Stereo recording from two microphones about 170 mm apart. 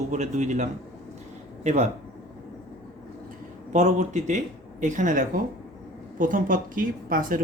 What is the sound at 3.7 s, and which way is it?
Speech, 45° right (ahead or behind).